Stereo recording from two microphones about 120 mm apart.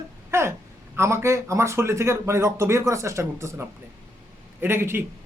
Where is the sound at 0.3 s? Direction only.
20° right (ahead or behind).